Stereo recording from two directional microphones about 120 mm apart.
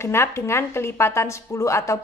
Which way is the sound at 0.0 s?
20° left (ahead or behind).